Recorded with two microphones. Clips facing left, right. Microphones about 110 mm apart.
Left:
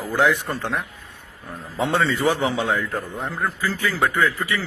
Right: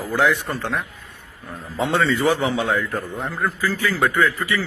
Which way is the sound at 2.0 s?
20° left (ahead or behind).